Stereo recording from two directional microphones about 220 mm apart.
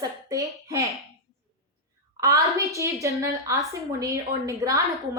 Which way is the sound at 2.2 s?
15° right (ahead or behind).